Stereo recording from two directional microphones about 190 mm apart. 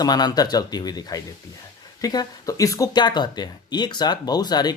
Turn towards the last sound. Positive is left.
turn(degrees=20)  # may be behind; listen again after turning